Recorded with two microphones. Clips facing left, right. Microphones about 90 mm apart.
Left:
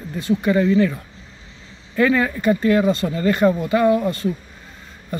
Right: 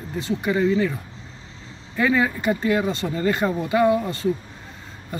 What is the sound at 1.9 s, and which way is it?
Speech, 20° right (ahead or behind).